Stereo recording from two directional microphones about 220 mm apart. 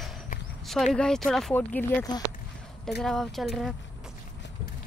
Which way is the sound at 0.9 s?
5° left (ahead or behind).